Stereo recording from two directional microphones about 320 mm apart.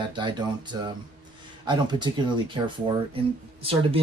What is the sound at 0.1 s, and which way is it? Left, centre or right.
Speech, centre.